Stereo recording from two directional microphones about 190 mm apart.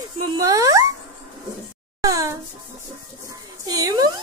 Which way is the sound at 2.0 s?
20° right (ahead or behind).